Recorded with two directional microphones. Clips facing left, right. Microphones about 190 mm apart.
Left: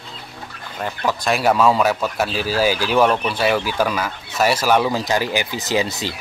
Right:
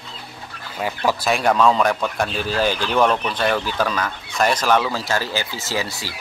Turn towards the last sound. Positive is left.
turn(degrees=20)  # may be behind; listen again after turning